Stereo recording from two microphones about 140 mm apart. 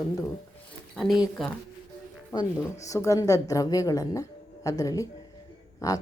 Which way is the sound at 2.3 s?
25° left (ahead or behind).